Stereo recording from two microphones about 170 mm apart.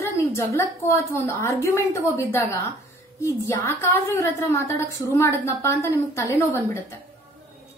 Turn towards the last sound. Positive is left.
turn(degrees=15)  # may be behind; listen again after turning